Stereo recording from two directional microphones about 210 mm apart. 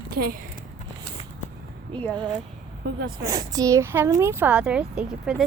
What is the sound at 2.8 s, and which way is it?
Speech, 50° right (ahead or behind).